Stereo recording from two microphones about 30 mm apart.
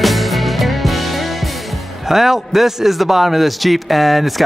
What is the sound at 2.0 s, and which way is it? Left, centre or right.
A man's voice, centre.